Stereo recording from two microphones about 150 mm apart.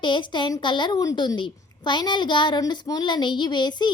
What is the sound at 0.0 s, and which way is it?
A woman's voice, 30° left (ahead or behind).